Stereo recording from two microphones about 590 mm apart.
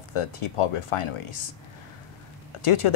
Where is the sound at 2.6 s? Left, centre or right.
Left.